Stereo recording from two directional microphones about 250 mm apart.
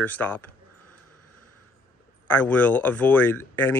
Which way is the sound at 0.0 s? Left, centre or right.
Centre.